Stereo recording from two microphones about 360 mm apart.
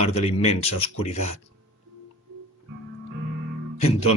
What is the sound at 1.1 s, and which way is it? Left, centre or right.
Speech, left.